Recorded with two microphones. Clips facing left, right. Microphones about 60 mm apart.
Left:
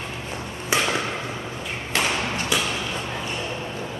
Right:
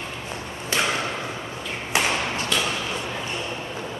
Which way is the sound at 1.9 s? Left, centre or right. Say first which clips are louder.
Right 1 dB; centre.